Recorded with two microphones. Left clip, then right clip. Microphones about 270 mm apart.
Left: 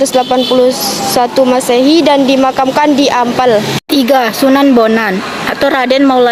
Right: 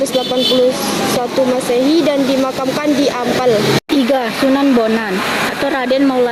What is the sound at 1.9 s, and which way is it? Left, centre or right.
Speech, left.